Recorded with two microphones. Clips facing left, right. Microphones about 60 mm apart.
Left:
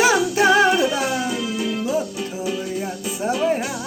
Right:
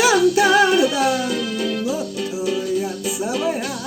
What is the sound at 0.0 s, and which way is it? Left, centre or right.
Music, left.